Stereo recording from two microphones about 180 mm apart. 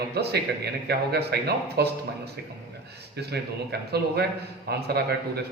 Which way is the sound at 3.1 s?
65° right (ahead or behind).